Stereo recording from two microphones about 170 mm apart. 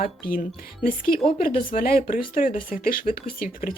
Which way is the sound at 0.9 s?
60° left (ahead or behind).